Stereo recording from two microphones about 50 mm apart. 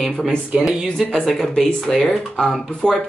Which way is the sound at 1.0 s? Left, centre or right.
Centre.